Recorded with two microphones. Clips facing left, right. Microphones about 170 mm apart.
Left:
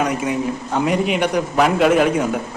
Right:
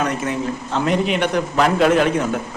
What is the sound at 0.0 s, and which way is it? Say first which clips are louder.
A man's voice: left 2 dB; 10° left (ahead or behind).